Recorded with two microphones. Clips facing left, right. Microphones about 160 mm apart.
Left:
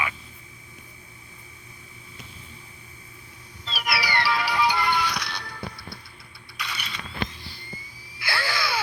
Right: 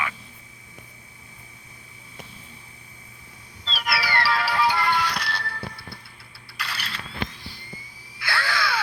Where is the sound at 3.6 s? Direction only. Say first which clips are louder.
Right 1 dB; 5° left (ahead or behind).